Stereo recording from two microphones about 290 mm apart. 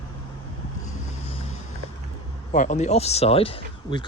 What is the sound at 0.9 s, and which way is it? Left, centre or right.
Boat, centre.